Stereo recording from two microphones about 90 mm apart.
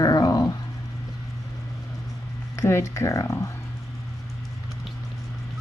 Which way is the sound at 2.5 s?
35° left (ahead or behind).